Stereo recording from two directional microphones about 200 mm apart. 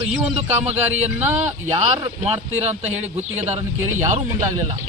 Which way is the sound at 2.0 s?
30° right (ahead or behind).